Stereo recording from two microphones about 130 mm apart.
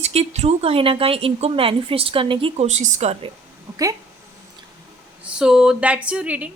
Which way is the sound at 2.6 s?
65° right (ahead or behind).